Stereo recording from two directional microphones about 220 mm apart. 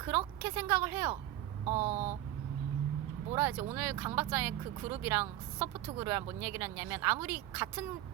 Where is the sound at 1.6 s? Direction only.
30° right (ahead or behind).